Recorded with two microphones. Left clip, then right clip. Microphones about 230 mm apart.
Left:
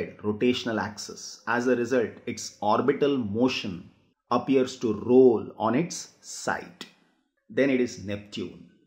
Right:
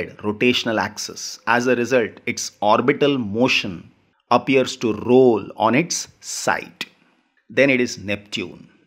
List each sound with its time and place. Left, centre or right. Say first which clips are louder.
0.0 s speech: right 6 dB; right